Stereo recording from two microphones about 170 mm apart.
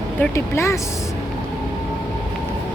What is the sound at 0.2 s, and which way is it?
Speech, 15° left (ahead or behind).